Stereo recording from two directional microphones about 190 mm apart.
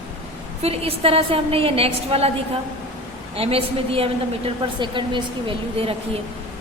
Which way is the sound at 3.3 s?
30° right (ahead or behind).